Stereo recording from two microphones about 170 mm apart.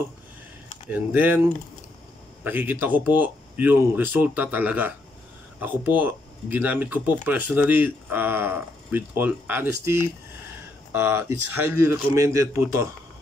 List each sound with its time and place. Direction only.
0.8 s speech: 10° right (ahead or behind)